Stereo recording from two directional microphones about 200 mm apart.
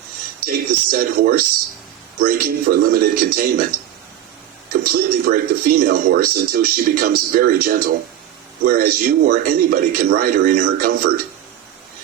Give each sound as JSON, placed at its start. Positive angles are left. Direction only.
{"t": 0.3, "sound": "speech", "side_deg": -50}
{"t": 4.7, "sound": "speech", "side_deg": -50}